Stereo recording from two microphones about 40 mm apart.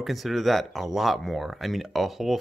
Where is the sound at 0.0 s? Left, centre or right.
Centre.